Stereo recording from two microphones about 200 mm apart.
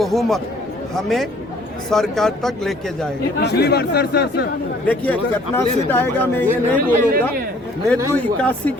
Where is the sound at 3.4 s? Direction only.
55° left (ahead or behind).